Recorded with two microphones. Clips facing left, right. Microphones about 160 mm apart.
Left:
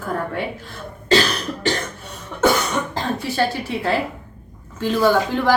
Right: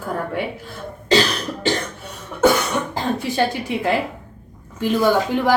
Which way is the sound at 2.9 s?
15° right (ahead or behind).